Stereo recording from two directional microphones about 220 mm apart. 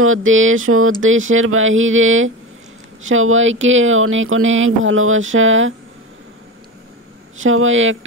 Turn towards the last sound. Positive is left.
turn(degrees=-60)  # may be behind; listen again after turning